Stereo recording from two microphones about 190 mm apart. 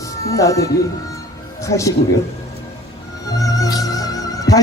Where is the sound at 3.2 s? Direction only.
20° left (ahead or behind).